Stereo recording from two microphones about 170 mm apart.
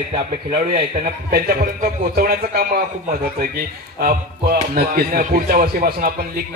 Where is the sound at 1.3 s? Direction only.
60° right (ahead or behind).